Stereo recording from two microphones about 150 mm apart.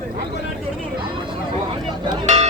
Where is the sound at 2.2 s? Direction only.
50° right (ahead or behind).